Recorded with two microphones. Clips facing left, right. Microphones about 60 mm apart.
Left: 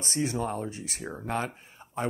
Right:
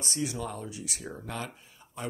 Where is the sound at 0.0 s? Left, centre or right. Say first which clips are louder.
Left 4 dB; left.